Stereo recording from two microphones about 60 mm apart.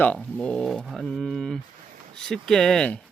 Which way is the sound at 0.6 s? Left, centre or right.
Centre.